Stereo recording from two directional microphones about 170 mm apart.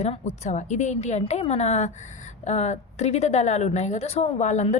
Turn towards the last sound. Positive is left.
turn(degrees=45)  # may be behind; listen again after turning